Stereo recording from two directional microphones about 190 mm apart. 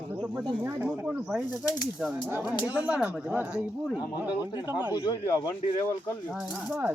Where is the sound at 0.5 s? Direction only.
10° right (ahead or behind).